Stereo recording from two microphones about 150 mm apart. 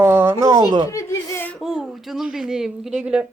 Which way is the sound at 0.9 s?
20° left (ahead or behind).